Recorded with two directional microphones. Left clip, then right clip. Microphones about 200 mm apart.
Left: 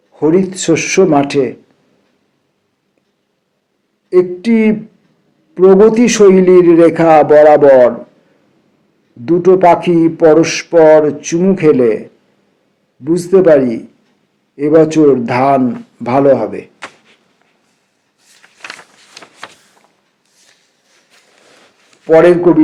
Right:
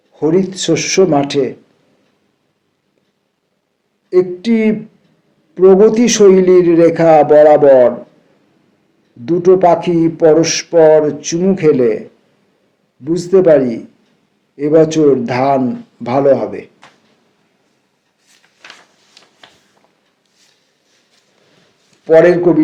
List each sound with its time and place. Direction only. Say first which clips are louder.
0.1 s speech: left 2 dB; 40° left (ahead or behind)
4.1 s speech: left 2 dB; 40° left (ahead or behind)
9.2 s speech: left 2 dB; 40° left (ahead or behind)
13.1 s speech: left 1 dB; 40° left (ahead or behind)
18.3 s a sound: left 8 dB; 50° left (ahead or behind)
22.0 s speech: left 1 dB; 40° left (ahead or behind)